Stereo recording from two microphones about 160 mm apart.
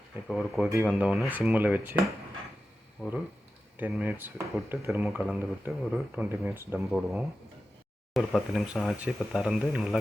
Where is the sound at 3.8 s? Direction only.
10° right (ahead or behind).